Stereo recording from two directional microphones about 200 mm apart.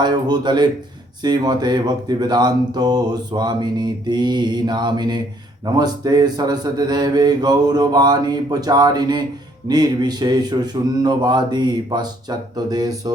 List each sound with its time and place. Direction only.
0.0 s speech: 20° right (ahead or behind)